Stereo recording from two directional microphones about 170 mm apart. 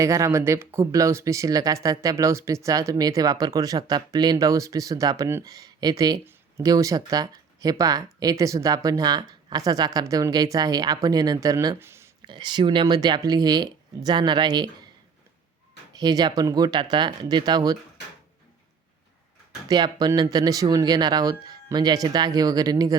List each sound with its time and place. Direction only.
0.0 s speech: 15° right (ahead or behind)
12.2 s speech: 25° right (ahead or behind)
16.0 s speech: 25° right (ahead or behind)
19.6 s speech: 25° right (ahead or behind)